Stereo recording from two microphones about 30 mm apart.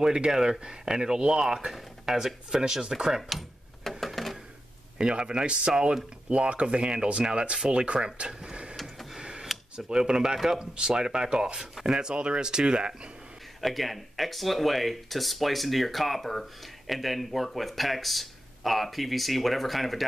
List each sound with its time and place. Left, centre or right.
0.0 s speech: right
2.5 s speech: right
3.2 s a sound: centre
4.9 s speech: right
8.3 s printer: right
9.8 s speech: right
10.6 s speech: right
13.6 s speech: centre